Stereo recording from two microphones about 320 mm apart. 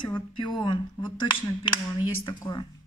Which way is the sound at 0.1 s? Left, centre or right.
Centre.